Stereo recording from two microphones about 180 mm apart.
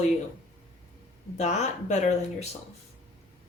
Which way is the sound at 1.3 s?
40° left (ahead or behind).